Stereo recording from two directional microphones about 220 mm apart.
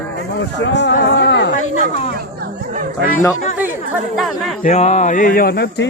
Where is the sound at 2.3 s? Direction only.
40° right (ahead or behind).